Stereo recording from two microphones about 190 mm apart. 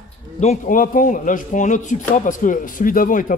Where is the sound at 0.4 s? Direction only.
40° left (ahead or behind).